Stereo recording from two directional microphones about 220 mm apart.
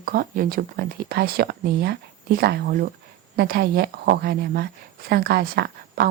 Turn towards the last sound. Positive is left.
turn(degrees=-45)  # may be behind; listen again after turning